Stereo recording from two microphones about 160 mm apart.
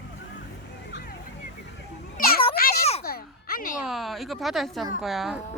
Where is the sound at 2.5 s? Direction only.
65° left (ahead or behind).